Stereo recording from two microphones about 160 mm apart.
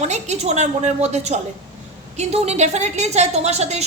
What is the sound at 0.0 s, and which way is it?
A woman's voice, 45° right (ahead or behind).